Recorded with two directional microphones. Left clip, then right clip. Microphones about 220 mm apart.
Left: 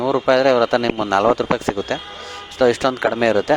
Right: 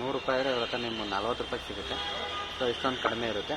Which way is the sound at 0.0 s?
45° left (ahead or behind).